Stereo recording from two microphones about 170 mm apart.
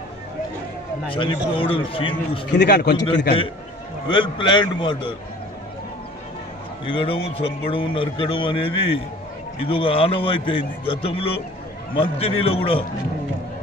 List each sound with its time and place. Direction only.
1.1 s a man's voice: 30° left (ahead or behind)
2.5 s a man's voice: 90° left
4.1 s a man's voice: 30° left (ahead or behind)
6.9 s a man's voice: 30° left (ahead or behind)